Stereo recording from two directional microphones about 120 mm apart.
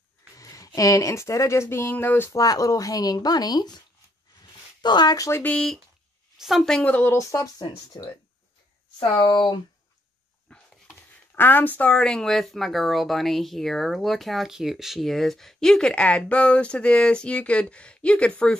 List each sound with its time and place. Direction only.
0.4 s speech: 30° left (ahead or behind)
2.3 s speech: 30° left (ahead or behind)
4.8 s speech: 35° left (ahead or behind)
5.4 s speech: 10° left (ahead or behind); by 8.1 s 30° left (ahead or behind)
9.1 s speech: 35° left (ahead or behind)
10.5 s dog: 10° left (ahead or behind)
11.3 s speech: 15° left (ahead or behind)